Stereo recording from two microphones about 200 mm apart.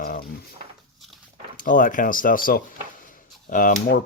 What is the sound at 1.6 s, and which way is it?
Speech, 40° left (ahead or behind).